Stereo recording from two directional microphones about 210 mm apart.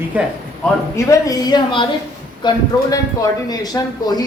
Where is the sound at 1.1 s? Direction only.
15° left (ahead or behind).